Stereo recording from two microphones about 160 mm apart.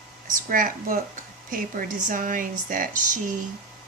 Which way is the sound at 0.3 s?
60° right (ahead or behind).